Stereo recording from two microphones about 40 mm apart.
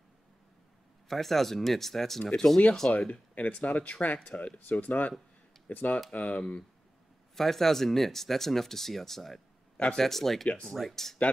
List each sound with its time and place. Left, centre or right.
1.0 s speech: centre
3.1 s speech: left
6.1 s speech: left
7.3 s speech: centre